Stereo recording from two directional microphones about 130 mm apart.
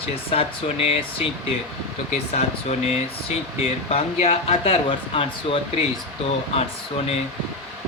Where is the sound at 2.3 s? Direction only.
55° left (ahead or behind).